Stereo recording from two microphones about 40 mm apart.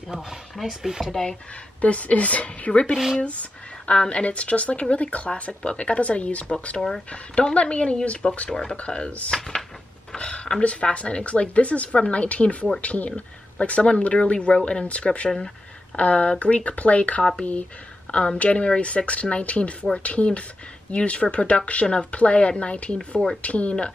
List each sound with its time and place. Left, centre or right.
0.6 s speech: centre
1.8 s speech: left
3.9 s speech: left